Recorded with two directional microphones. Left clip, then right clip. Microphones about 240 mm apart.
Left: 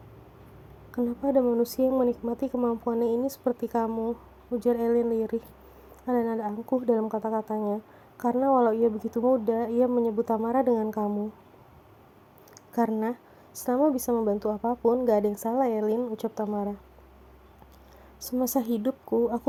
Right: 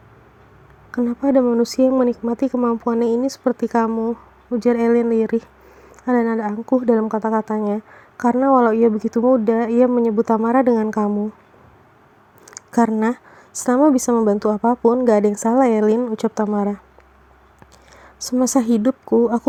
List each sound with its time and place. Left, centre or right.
0.9 s speech: right
12.5 s speech: right
18.2 s speech: right